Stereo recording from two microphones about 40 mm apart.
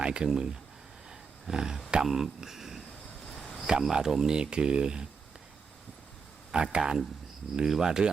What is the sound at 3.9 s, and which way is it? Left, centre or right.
Speech, centre.